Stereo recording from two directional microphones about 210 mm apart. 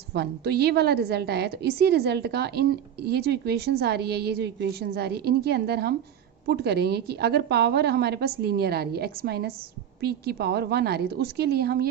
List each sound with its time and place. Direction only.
0.1 s a woman's voice: 50° right (ahead or behind)